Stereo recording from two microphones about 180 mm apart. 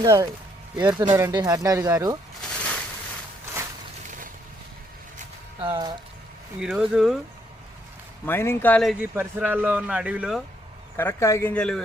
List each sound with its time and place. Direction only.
0.0 s speech: 20° right (ahead or behind)
5.5 s a sound: 25° right (ahead or behind)
6.6 s speech: 5° right (ahead or behind)
8.2 s speech: 15° left (ahead or behind)
9.1 s speech: 10° right (ahead or behind)
10.9 s speech: 15° left (ahead or behind)